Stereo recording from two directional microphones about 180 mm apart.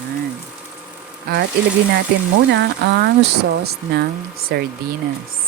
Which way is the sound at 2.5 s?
65° right (ahead or behind).